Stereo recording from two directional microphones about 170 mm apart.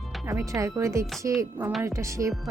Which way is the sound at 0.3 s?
20° right (ahead or behind).